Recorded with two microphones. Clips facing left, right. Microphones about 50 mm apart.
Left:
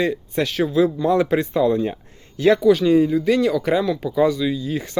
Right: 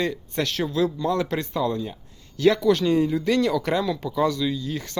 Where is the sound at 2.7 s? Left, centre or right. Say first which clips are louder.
Left 5 dB; centre.